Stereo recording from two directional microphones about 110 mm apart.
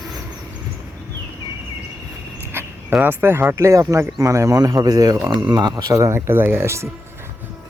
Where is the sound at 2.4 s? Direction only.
20° right (ahead or behind).